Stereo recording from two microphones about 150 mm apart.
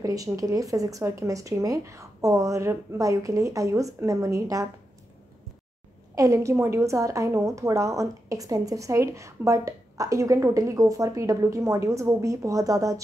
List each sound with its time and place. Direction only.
0.0 s a woman's voice: 20° right (ahead or behind)
6.1 s a woman's voice: 20° right (ahead or behind)